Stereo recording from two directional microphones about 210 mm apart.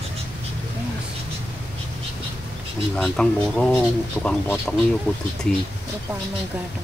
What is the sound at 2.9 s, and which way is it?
Speech, 5° left (ahead or behind).